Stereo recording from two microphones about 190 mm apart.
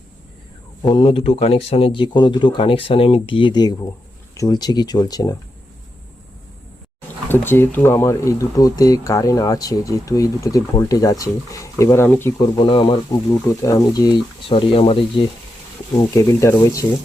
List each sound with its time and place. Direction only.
0.8 s speech: 25° left (ahead or behind)
7.3 s speech: 10° left (ahead or behind)
12.4 s speech: 25° left (ahead or behind)
16.1 s speech: 15° left (ahead or behind)